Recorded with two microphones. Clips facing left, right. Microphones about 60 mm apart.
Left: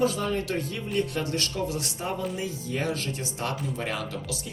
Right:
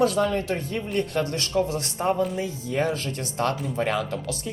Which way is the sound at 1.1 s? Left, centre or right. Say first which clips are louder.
Right 5 dB; right.